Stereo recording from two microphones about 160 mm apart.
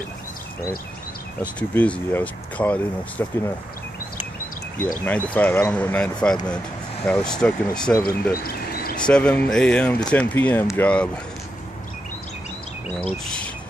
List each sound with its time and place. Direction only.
1.4 s speech: 10° left (ahead or behind)
5.0 s speech: 10° left (ahead or behind)
8.0 s speech: 70° left (ahead or behind)
9.0 s speech: 5° left (ahead or behind)
13.0 s speech: 5° left (ahead or behind)